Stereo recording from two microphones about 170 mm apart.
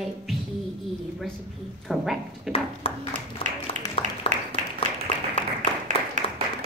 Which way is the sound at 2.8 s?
35° left (ahead or behind).